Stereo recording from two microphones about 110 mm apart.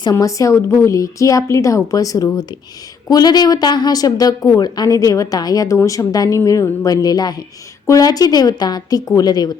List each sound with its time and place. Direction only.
0.0 s a woman's voice: 30° left (ahead or behind)